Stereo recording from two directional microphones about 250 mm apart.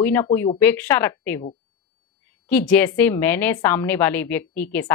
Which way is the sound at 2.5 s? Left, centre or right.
Centre.